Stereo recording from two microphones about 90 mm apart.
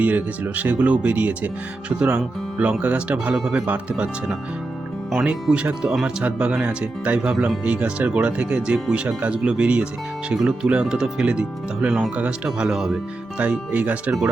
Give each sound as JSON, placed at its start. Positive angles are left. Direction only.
{"t": 0.0, "sound": "speech", "side_deg": -20}
{"t": 3.3, "sound": "speech", "side_deg": -5}
{"t": 7.3, "sound": "speech", "side_deg": -5}
{"t": 7.6, "sound": "speech", "side_deg": -15}